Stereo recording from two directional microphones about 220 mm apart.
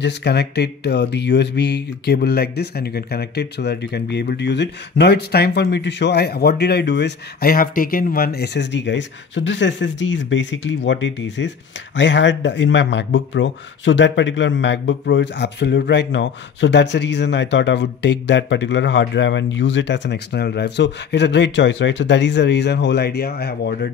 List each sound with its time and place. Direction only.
0.0 s speech: 50° left (ahead or behind)